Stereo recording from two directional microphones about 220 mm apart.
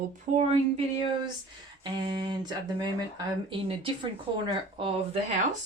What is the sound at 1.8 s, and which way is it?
Speech, 20° right (ahead or behind).